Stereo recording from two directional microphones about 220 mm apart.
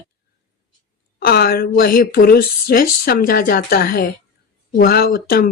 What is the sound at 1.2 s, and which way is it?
Speech, 45° left (ahead or behind).